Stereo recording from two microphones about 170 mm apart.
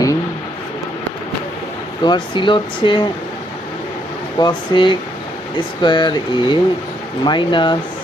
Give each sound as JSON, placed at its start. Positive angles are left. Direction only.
{"t": 2.0, "sound": "speech", "side_deg": 25}
{"t": 4.4, "sound": "speech", "side_deg": 25}